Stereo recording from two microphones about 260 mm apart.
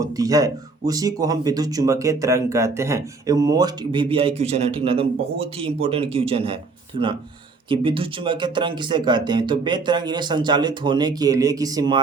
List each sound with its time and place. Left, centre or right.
0.0 s speech: centre
7.7 s speech: centre